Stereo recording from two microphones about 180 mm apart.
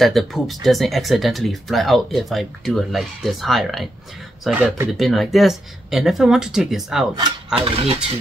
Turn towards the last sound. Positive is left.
turn(degrees=-30)  # may be behind; listen again after turning